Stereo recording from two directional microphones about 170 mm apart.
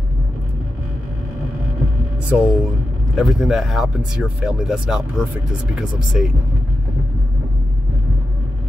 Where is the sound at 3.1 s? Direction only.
Centre (ahead or behind).